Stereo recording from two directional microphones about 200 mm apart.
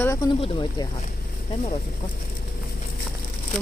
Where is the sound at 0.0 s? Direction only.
15° left (ahead or behind).